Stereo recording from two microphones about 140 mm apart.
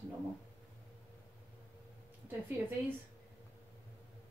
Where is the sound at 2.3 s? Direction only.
15° right (ahead or behind).